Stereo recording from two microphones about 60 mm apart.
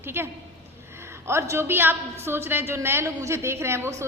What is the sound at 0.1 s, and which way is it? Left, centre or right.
A woman's voice, right.